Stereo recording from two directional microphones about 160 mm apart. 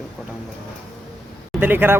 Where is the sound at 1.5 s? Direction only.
15° right (ahead or behind).